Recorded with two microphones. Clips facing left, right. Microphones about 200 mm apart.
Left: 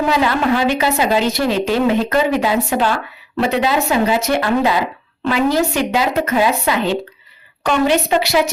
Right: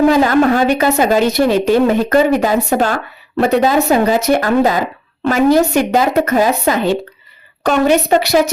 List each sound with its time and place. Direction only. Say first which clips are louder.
0.1 s speech: right 5 dB; 45° right (ahead or behind)